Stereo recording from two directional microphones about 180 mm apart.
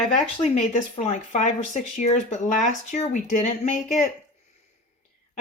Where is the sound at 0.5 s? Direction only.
40° left (ahead or behind).